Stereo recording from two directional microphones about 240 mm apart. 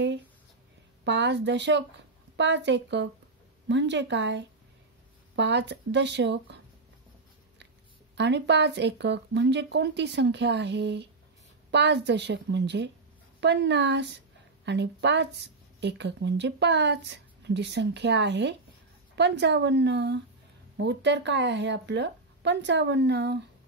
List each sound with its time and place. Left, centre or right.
1.0 s speech: right
8.2 s a woman's voice: right